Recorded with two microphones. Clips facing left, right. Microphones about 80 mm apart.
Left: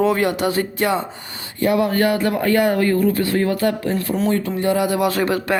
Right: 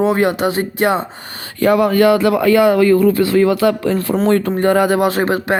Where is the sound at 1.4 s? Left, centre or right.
Right.